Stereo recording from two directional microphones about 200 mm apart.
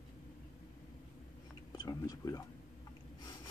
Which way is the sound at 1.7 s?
20° left (ahead or behind).